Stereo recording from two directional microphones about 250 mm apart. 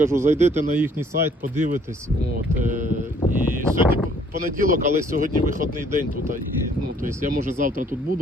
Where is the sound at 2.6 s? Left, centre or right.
Right.